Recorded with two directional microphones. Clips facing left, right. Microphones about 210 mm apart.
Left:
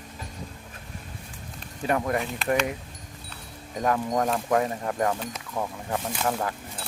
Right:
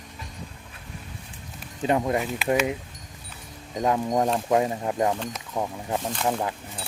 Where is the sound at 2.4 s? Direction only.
5° right (ahead or behind).